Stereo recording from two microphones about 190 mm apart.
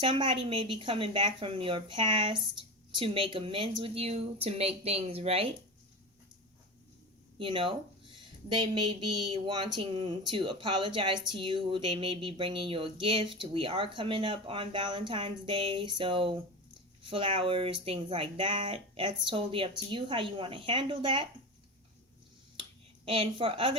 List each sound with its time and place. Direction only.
0.0 s speech: 25° right (ahead or behind)
7.3 s speech: 25° right (ahead or behind)
23.0 s speech: 30° right (ahead or behind)